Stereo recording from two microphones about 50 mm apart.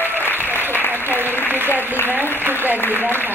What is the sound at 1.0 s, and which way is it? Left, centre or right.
Applause, right.